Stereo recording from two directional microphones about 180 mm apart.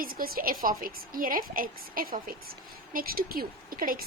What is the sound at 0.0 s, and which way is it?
A woman's voice, 55° right (ahead or behind).